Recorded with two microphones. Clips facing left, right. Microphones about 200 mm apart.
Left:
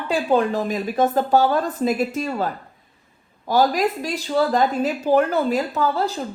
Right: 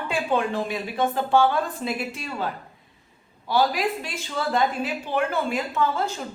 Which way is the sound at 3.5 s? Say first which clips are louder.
Left 4 dB; 45° left (ahead or behind).